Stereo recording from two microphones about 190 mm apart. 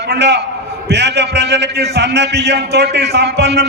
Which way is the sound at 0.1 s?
65° right (ahead or behind).